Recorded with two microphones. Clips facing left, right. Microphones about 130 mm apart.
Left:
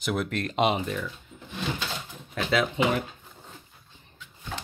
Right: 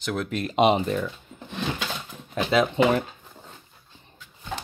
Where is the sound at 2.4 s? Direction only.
20° right (ahead or behind).